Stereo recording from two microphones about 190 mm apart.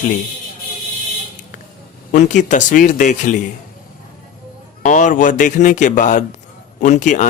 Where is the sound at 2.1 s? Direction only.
40° left (ahead or behind).